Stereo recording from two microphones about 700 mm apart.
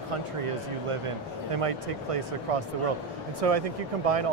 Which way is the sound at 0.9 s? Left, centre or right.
Right.